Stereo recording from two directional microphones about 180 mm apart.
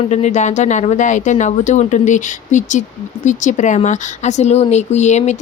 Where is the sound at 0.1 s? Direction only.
40° left (ahead or behind).